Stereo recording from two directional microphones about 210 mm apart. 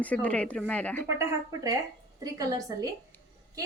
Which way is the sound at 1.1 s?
15° right (ahead or behind).